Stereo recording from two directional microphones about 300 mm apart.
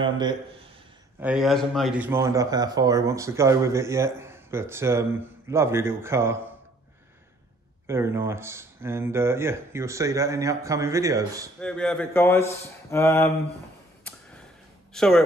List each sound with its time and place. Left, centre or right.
0.0 s a man's voice: centre
1.2 s a man's voice: centre
7.8 s a man's voice: centre
11.6 s speech: centre
15.0 s a man's voice: centre